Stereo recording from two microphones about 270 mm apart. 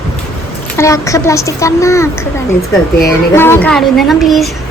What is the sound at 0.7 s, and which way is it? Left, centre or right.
Speech, centre.